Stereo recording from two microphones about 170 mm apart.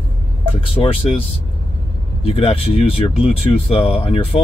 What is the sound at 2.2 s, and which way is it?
Speech, 35° left (ahead or behind).